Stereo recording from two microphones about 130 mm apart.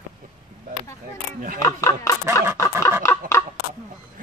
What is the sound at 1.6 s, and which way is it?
Speech, 25° left (ahead or behind).